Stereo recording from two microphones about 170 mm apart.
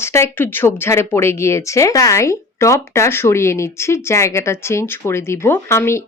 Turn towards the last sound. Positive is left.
turn(degrees=15)  # may be behind; listen again after turning